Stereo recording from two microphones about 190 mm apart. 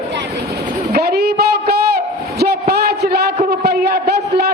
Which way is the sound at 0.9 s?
55° right (ahead or behind).